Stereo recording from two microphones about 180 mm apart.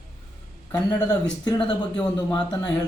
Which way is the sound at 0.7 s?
20° left (ahead or behind).